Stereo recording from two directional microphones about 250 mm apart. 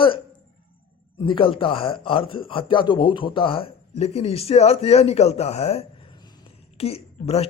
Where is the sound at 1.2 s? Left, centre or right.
Left.